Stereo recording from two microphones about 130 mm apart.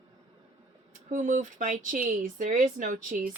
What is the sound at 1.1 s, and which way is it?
Speech, 80° right.